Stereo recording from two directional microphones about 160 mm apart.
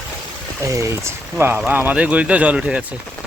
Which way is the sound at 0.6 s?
20° right (ahead or behind).